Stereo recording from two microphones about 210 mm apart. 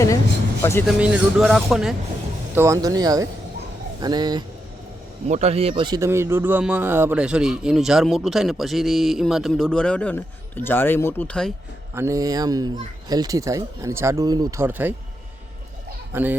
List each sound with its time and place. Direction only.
0.6 s speech: 10° left (ahead or behind)
0.9 s speech: 5° right (ahead or behind)
2.6 s speech: 15° right (ahead or behind)
5.3 s speech: 30° right (ahead or behind); by 11.5 s 5° left (ahead or behind)
11.9 s speech: 15° right (ahead or behind)
16.1 s speech: 10° right (ahead or behind)